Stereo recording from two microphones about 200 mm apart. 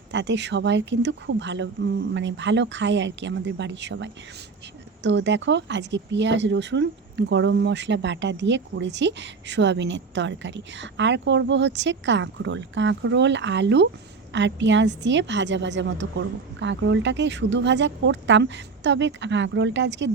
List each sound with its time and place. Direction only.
0.1 s speech: 60° right (ahead or behind)